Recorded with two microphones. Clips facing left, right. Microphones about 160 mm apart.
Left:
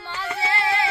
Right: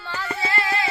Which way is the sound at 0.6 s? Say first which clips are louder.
Left 4 dB; 25° left (ahead or behind).